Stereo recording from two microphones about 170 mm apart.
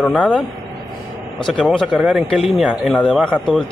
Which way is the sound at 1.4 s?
5° left (ahead or behind).